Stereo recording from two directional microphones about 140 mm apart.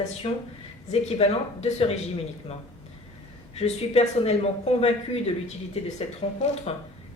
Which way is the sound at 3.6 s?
50° left (ahead or behind).